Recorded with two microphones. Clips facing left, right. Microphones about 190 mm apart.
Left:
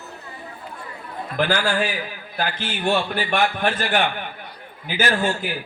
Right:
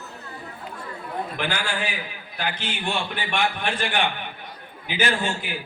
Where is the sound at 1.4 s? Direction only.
45° left (ahead or behind).